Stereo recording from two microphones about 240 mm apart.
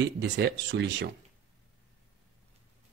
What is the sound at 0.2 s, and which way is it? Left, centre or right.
Speech, right.